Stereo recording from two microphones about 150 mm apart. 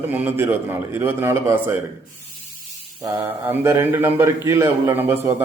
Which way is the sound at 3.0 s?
15° right (ahead or behind).